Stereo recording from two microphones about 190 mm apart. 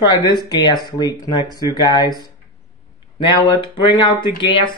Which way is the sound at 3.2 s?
25° left (ahead or behind).